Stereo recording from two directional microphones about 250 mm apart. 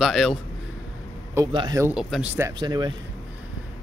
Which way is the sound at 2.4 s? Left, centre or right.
Centre.